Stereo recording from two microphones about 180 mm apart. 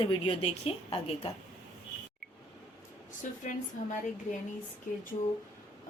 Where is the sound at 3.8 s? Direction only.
45° left (ahead or behind).